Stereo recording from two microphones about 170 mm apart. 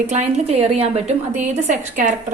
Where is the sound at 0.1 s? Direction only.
40° right (ahead or behind).